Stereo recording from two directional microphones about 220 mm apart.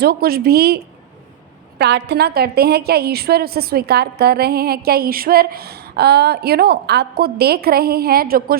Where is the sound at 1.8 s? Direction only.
50° right (ahead or behind).